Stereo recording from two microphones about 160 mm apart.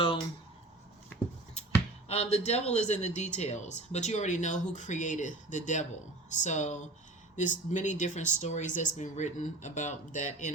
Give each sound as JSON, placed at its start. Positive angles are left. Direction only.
{"t": 2.0, "sound": "speech", "side_deg": 40}